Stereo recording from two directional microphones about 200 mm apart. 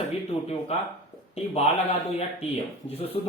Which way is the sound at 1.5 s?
30° left (ahead or behind).